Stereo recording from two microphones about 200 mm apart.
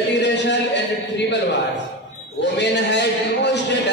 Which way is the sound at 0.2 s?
60° left (ahead or behind).